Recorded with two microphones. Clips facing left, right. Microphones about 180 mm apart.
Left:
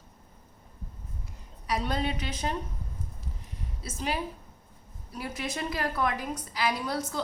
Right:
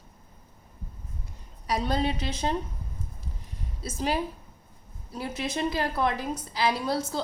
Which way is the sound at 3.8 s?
35° right (ahead or behind).